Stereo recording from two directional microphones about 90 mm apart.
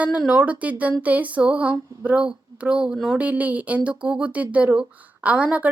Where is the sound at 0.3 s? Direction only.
15° right (ahead or behind).